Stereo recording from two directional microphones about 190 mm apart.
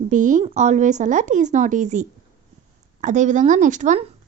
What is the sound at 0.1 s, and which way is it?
A woman's voice, 40° right (ahead or behind).